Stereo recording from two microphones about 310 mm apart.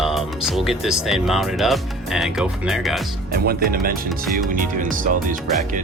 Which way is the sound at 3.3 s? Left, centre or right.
Right.